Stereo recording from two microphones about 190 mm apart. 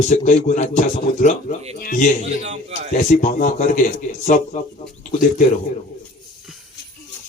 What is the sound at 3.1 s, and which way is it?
A man's voice, 40° left (ahead or behind).